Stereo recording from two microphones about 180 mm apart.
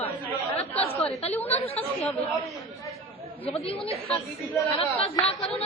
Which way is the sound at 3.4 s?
30° left (ahead or behind).